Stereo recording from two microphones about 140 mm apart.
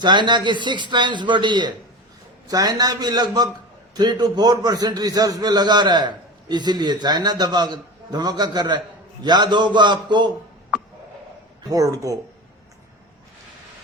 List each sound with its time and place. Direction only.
0.0 s a man's voice: 30° right (ahead or behind)
11.7 s a man's voice: 25° right (ahead or behind)